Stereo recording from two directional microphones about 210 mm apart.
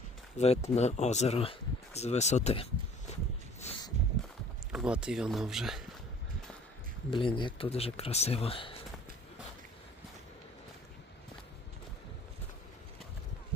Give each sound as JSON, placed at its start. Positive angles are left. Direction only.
{"t": 0.3, "sound": "speech", "side_deg": 30}
{"t": 3.6, "sound": "a sound", "side_deg": 30}
{"t": 4.7, "sound": "speech", "side_deg": -5}
{"t": 7.1, "sound": "speech", "side_deg": 25}